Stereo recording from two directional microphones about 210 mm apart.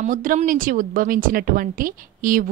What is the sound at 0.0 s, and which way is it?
A woman's voice, 40° right (ahead or behind).